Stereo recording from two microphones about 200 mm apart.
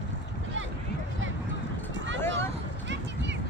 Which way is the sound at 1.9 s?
70° right (ahead or behind).